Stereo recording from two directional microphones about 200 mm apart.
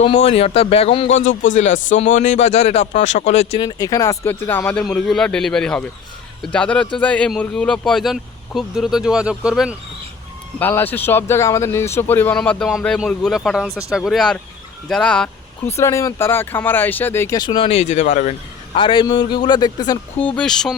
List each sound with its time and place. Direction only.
0.1 s speech: 30° left (ahead or behind)
3.6 s speech: 20° left (ahead or behind); by 9.7 s 5° right (ahead or behind)
10.6 s speech: 10° left (ahead or behind)
15.8 s speech: 15° left (ahead or behind)
20.1 s speech: 5° left (ahead or behind)